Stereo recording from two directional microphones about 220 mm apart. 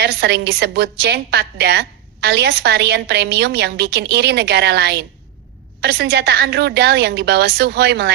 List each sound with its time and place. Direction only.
0.0 s a woman's voice: 50° right (ahead or behind)